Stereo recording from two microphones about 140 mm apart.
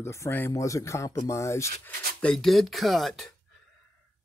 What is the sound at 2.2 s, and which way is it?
Speech, centre (ahead or behind).